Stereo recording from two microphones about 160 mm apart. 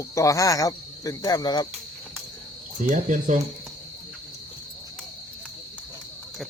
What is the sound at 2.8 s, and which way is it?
Speech, 55° right (ahead or behind).